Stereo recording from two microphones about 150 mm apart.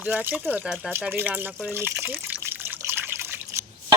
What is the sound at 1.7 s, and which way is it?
Water, 15° right (ahead or behind).